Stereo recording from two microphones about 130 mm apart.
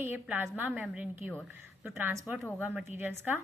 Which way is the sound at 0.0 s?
15° right (ahead or behind).